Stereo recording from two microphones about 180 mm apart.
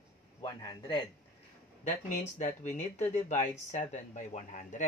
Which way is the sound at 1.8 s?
45° left (ahead or behind).